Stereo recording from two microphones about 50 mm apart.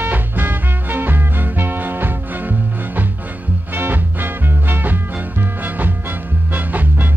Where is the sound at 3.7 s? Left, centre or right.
Right.